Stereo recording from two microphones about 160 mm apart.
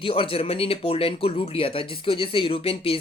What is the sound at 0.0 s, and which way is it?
Speech, 35° left (ahead or behind).